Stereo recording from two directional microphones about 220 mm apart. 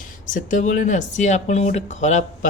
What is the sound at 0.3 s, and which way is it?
A woman's voice, 35° left (ahead or behind).